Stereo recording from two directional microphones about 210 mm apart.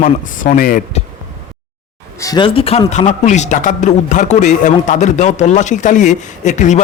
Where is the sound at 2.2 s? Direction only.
20° left (ahead or behind).